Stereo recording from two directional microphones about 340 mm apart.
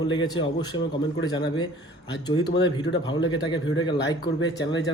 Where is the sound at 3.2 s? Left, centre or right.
Centre.